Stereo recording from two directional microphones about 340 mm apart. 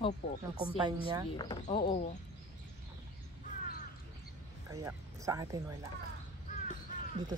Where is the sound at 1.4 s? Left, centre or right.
Centre.